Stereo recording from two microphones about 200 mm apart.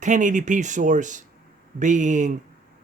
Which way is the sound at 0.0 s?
40° right (ahead or behind).